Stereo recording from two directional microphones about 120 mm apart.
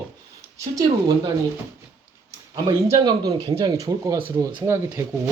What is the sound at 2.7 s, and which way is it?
Speech, 40° right (ahead or behind).